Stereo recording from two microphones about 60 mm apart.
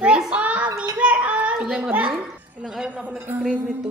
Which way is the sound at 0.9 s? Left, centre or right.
Right.